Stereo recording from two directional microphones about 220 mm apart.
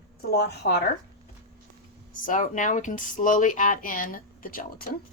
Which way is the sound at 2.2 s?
35° left (ahead or behind).